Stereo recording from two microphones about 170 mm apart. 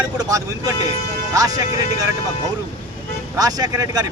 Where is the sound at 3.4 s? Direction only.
20° right (ahead or behind).